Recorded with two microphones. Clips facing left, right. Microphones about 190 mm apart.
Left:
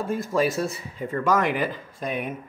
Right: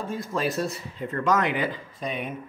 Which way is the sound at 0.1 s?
5° left (ahead or behind).